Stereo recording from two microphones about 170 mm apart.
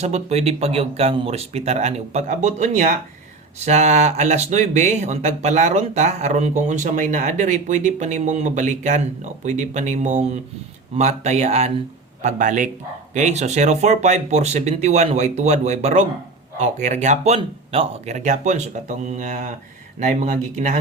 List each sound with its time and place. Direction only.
0.0 s speech: 40° right (ahead or behind)